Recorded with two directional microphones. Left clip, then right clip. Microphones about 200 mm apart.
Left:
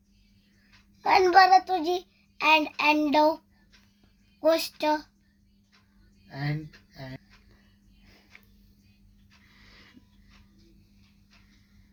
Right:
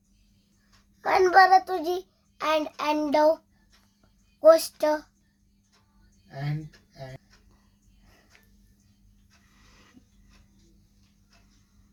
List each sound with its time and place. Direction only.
1.0 s child singing: 25° right (ahead or behind)
4.4 s child singing: 20° right (ahead or behind)